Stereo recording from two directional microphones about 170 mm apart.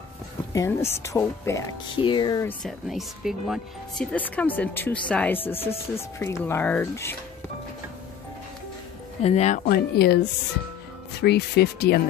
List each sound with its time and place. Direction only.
0.5 s speech: 20° left (ahead or behind)
2.0 s speech: 30° left (ahead or behind)
2.4 s speech: centre (ahead or behind)
4.1 s speech: 10° left (ahead or behind)
9.2 s speech: 40° left (ahead or behind)
9.7 s speech: 70° left (ahead or behind)
11.1 s speech: 75° left (ahead or behind)